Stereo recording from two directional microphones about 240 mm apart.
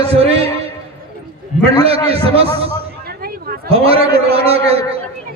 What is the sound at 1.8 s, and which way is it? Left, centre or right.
Speech, right.